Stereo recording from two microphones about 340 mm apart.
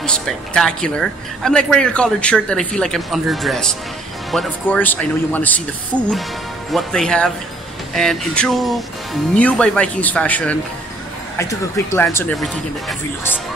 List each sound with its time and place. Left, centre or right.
0.0 s speech: centre
6.7 s speech: centre